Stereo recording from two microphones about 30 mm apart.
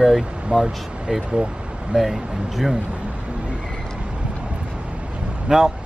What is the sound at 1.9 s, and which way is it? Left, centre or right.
Speech, centre.